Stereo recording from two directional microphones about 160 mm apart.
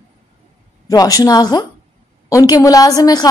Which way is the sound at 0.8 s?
20° left (ahead or behind).